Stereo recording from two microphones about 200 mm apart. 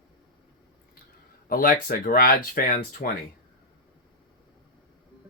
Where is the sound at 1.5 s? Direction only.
45° left (ahead or behind).